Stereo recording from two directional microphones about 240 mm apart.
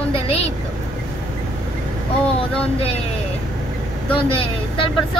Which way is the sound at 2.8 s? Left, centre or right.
Left.